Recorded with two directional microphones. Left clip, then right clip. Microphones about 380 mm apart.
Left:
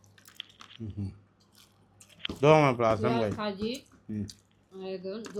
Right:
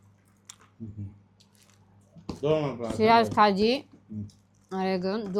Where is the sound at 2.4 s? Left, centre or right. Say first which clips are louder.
Left 5 dB; left.